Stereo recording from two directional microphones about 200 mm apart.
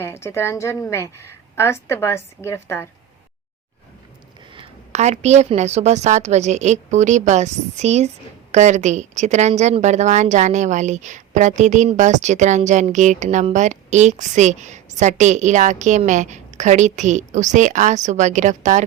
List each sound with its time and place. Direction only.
0.0 s a woman's voice: 15° left (ahead or behind)
4.5 s a woman's voice: 30° right (ahead or behind)